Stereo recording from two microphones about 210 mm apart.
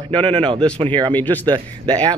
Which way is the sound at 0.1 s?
25° right (ahead or behind).